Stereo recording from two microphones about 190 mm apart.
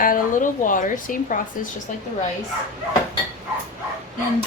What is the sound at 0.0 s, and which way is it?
A woman's voice, 45° left (ahead or behind).